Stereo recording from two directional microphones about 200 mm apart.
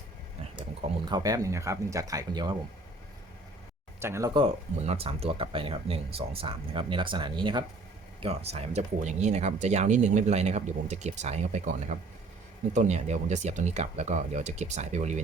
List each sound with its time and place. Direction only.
0.9 s speech: 20° right (ahead or behind)
4.0 s speech: 15° right (ahead or behind)
4.4 s speech: 30° right (ahead or behind)